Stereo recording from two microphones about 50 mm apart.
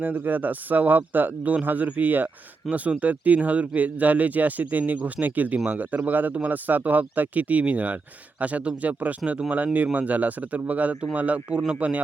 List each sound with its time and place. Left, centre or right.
0.0 s speech: right